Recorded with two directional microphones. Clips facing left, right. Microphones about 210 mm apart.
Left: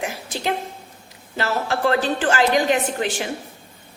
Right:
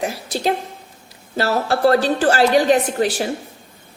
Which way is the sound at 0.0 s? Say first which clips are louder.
Right 5 dB; 35° right (ahead or behind).